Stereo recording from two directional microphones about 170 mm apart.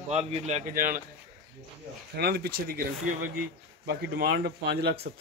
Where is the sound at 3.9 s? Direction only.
70° right (ahead or behind).